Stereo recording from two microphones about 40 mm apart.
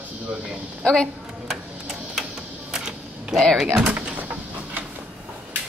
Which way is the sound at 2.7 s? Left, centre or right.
Centre.